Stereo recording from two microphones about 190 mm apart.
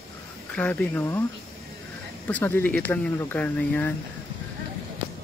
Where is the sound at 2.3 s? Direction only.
10° left (ahead or behind).